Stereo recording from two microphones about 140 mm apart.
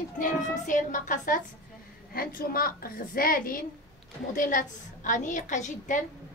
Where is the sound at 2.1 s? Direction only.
90° left.